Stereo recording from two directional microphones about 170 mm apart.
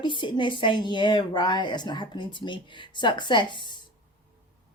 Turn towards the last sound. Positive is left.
turn(degrees=25)  # may be behind; listen again after turning